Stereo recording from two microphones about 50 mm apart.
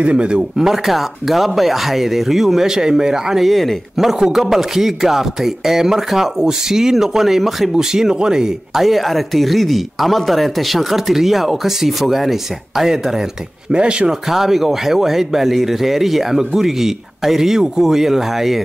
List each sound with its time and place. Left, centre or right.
0.0 s speech: right
13.7 s speech: right
14.3 s speech: centre